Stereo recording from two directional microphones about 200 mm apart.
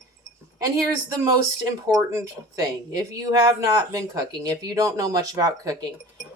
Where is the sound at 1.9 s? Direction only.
15° right (ahead or behind).